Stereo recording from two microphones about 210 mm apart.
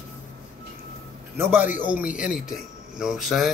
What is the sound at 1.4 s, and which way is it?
A man's voice, 10° right (ahead or behind).